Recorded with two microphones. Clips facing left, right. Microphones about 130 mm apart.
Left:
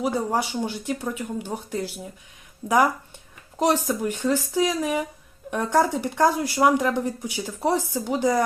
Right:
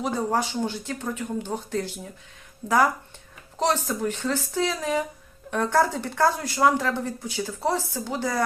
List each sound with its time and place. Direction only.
0.0 s speech: 10° left (ahead or behind)